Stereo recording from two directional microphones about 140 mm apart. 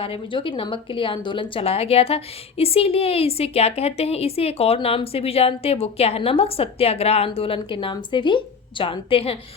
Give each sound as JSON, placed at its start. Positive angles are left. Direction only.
{"t": 0.0, "sound": "a woman's voice", "side_deg": 40}